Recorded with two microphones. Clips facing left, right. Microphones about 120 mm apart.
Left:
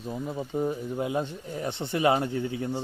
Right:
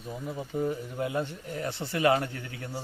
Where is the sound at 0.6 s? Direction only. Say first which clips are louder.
Left 1 dB; 20° left (ahead or behind).